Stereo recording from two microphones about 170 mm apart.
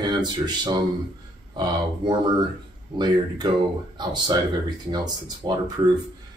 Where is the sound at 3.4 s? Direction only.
25° right (ahead or behind).